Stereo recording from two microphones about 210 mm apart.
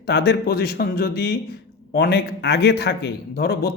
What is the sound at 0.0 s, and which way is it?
A man's voice, 50° left (ahead or behind).